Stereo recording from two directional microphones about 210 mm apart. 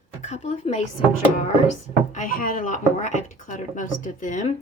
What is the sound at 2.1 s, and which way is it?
A woman's voice, 40° left (ahead or behind).